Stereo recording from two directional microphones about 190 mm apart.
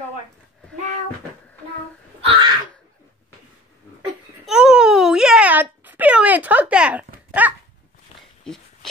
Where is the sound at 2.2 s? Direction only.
30° right (ahead or behind).